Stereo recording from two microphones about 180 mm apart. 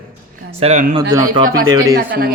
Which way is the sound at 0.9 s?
20° right (ahead or behind).